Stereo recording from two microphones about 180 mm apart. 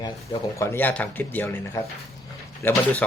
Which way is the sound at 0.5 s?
15° left (ahead or behind).